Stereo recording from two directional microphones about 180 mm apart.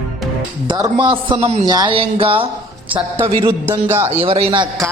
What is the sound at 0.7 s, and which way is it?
Speech, 25° right (ahead or behind).